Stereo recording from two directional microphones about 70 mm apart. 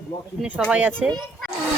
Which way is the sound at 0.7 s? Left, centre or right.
Centre.